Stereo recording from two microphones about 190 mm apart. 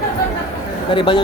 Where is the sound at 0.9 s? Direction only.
25° left (ahead or behind).